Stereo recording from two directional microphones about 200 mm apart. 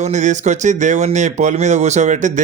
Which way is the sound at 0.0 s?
35° right (ahead or behind).